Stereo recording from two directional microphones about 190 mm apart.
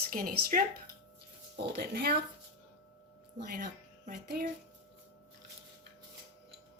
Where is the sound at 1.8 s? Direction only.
50° right (ahead or behind).